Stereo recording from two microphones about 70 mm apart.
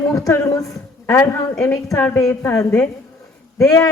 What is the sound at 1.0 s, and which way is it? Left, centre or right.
A woman's voice, left.